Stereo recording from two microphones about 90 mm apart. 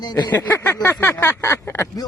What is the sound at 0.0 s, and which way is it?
Speech, 50° left (ahead or behind).